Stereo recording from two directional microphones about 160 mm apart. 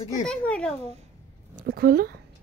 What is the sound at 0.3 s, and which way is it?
Speech, 5° left (ahead or behind).